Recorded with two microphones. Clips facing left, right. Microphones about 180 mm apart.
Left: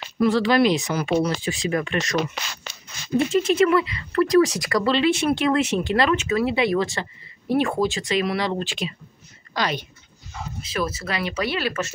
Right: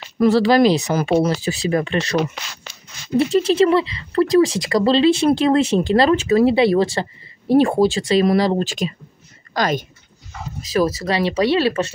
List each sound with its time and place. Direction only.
0.2 s speech: 35° right (ahead or behind)
3.3 s a woman's voice: 35° right (ahead or behind)